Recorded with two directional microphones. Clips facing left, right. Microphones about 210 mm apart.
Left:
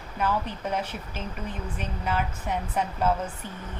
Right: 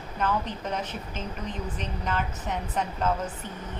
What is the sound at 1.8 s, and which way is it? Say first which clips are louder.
Speech: left 3 dB; 10° left (ahead or behind).